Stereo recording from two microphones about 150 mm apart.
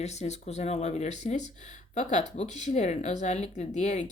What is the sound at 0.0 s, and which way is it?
A woman's voice, 50° left (ahead or behind).